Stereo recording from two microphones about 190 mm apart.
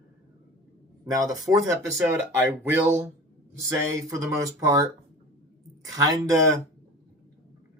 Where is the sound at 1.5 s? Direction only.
15° right (ahead or behind).